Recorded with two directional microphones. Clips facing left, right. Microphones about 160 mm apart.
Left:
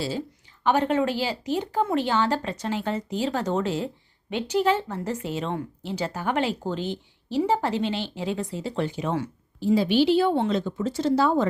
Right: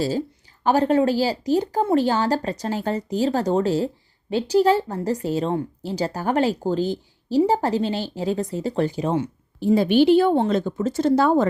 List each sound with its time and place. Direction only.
0.6 s a woman's voice: 35° right (ahead or behind)
9.6 s a woman's voice: 50° right (ahead or behind)